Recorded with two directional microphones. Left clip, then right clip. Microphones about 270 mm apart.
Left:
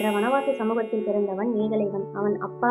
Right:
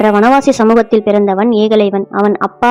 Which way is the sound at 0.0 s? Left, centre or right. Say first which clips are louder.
Right 14 dB; right.